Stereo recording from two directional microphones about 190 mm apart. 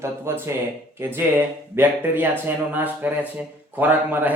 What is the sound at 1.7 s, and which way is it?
Speech, 10° right (ahead or behind).